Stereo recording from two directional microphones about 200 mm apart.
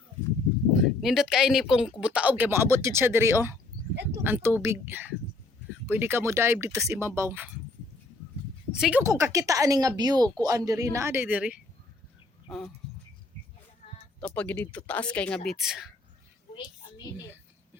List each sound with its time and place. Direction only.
0.7 s a woman's voice: centre (ahead or behind)
8.7 s speech: 5° right (ahead or behind)
14.2 s speech: 5° left (ahead or behind)